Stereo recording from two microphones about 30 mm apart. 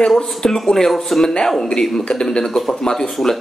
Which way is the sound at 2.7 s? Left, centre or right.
Centre.